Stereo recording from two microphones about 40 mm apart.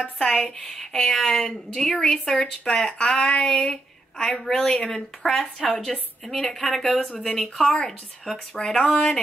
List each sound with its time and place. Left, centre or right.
0.0 s a woman's voice: centre
3.4 s a woman's voice: centre
5.6 s speech: left
5.9 s a woman's voice: centre
8.5 s speech: left